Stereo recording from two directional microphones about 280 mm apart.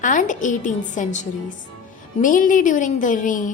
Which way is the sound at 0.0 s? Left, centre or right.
Left.